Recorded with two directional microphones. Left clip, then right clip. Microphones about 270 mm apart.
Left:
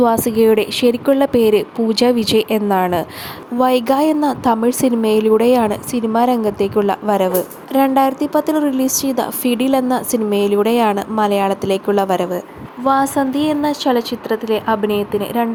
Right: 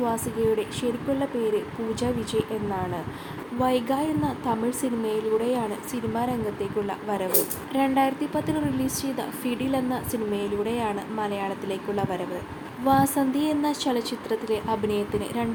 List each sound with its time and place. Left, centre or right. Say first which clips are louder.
0.0 s a woman's voice: left 12 dB; left
12.8 s a woman's voice: left 7 dB; centre